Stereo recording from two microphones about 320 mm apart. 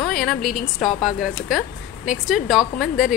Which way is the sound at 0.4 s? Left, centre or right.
Left.